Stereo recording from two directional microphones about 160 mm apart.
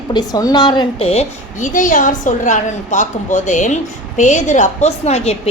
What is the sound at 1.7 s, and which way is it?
A woman's voice, 55° left (ahead or behind).